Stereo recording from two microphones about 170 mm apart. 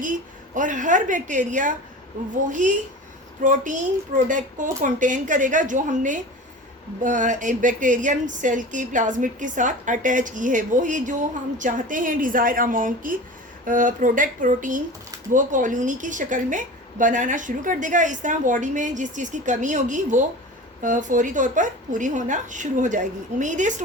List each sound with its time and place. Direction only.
0.0 s a woman's voice: 50° right (ahead or behind)